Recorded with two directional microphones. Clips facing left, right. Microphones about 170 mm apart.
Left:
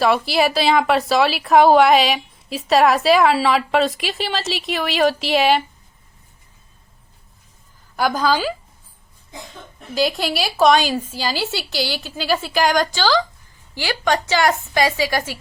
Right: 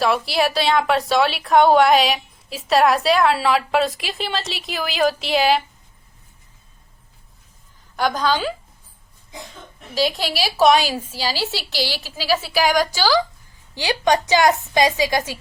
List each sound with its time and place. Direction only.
0.0 s a woman's voice: centre (ahead or behind)
7.9 s a woman's voice: 5° left (ahead or behind)
9.9 s a woman's voice: centre (ahead or behind); by 15.4 s 15° right (ahead or behind)